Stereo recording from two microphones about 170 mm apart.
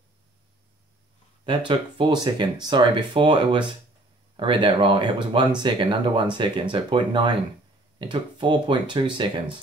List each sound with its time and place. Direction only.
1.7 s speech: 25° right (ahead or behind)